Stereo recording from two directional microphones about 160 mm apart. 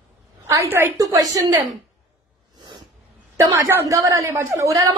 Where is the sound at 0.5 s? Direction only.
15° right (ahead or behind).